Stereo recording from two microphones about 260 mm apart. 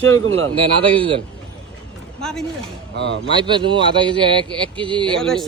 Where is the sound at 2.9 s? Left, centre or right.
Right.